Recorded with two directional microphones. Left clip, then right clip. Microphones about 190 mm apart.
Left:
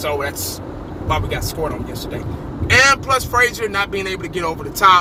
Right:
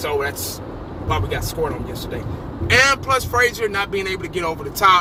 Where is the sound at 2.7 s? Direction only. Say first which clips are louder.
Left 2 dB; 15° left (ahead or behind).